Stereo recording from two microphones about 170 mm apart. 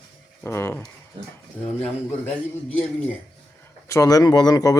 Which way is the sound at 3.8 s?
20° left (ahead or behind).